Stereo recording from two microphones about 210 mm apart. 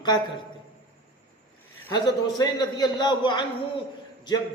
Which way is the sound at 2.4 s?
20° left (ahead or behind).